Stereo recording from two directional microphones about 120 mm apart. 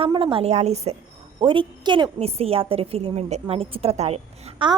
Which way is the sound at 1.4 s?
45° right (ahead or behind).